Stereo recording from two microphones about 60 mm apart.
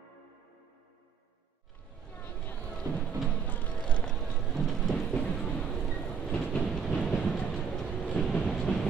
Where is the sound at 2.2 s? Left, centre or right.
Left.